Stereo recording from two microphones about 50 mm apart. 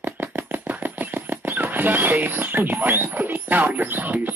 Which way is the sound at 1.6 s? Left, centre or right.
Right.